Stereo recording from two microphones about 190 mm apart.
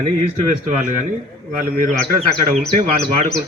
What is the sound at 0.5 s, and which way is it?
Speech, 45° right (ahead or behind).